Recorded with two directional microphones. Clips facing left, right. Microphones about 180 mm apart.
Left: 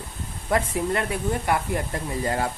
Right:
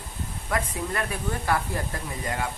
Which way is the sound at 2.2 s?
35° left (ahead or behind).